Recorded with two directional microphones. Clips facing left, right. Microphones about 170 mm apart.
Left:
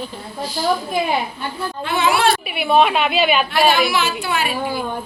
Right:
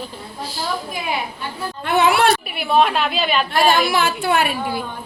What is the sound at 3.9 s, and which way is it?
Speech, 50° right (ahead or behind).